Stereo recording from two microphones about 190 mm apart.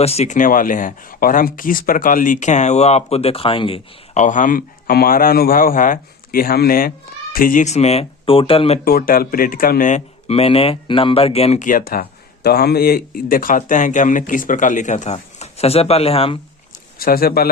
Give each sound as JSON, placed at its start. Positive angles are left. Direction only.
{"t": 0.0, "sound": "speech", "side_deg": 35}
{"t": 8.8, "sound": "speech", "side_deg": 50}
{"t": 17.0, "sound": "speech", "side_deg": 50}